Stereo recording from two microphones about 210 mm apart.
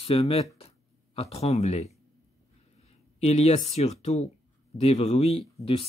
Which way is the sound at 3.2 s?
30° left (ahead or behind).